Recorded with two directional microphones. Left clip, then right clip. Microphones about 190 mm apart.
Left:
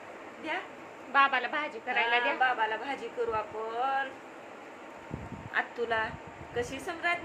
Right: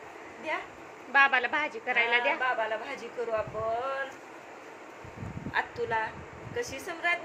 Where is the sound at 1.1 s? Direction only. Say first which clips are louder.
Right 2 dB; 15° right (ahead or behind).